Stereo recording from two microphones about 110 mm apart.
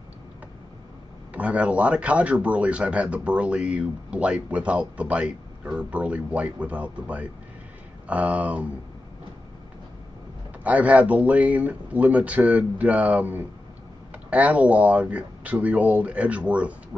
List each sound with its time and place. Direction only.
1.3 s speech: 10° right (ahead or behind)
10.6 s speech: 10° right (ahead or behind)